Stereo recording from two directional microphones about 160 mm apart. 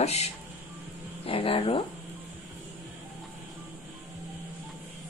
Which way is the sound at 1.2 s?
35° left (ahead or behind).